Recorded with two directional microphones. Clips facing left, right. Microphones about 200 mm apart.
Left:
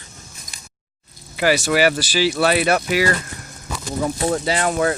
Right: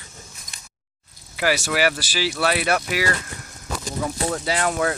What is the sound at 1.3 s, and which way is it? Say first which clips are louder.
Speech: left 4 dB; 5° right (ahead or behind).